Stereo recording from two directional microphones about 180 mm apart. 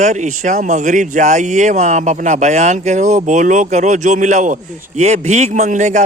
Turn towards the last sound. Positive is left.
turn(degrees=-40)  # may be behind; listen again after turning